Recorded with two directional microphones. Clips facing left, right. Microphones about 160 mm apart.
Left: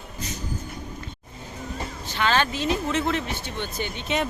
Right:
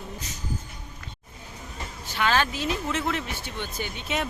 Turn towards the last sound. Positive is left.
turn(degrees=-5)  # may be behind; listen again after turning